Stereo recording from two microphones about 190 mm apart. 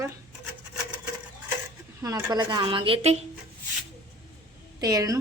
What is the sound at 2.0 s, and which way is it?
A woman's voice, 20° right (ahead or behind).